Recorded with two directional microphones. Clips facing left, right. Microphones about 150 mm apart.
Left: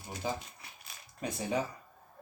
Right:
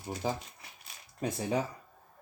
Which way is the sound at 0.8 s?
30° right (ahead or behind).